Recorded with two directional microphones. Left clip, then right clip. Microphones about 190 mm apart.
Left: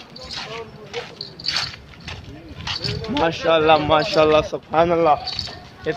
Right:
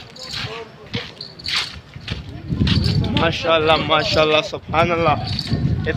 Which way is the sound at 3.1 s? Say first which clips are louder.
Even; 45° left (ahead or behind).